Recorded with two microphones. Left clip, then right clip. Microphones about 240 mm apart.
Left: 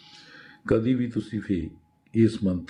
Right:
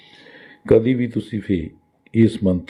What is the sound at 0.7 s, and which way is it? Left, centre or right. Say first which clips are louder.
Speech: right 9 dB; centre.